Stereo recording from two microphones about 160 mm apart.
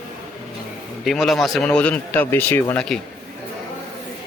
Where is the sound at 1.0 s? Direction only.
Centre (ahead or behind).